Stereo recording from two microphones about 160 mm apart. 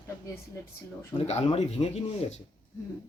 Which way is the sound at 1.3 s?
40° left (ahead or behind).